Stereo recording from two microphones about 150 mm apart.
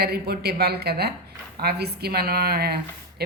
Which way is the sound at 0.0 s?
90° right.